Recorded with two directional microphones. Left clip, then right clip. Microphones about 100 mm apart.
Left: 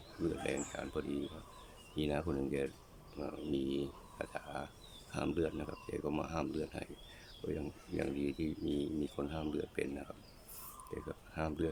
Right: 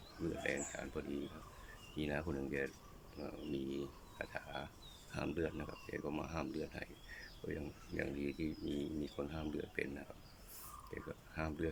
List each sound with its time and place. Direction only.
0.4 s speech: 30° left (ahead or behind)
10.9 s speech: 30° left (ahead or behind)